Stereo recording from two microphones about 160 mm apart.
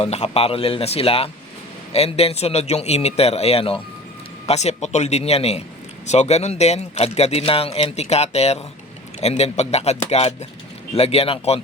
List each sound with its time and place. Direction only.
0.0 s a man's voice: 40° left (ahead or behind)